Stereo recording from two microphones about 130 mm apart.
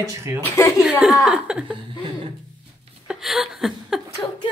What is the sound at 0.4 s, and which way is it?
Speech, 25° left (ahead or behind).